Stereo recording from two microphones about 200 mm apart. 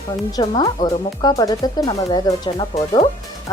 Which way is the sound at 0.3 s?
20° left (ahead or behind).